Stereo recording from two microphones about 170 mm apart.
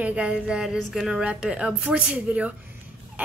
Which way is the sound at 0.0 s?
5° right (ahead or behind).